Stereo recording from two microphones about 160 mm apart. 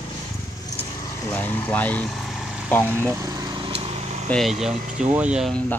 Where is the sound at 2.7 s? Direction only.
10° left (ahead or behind).